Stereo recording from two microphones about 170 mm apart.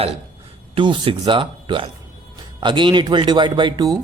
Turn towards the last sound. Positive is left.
turn(degrees=-25)  # may be behind; listen again after turning